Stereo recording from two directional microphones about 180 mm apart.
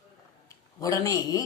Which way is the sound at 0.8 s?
20° left (ahead or behind).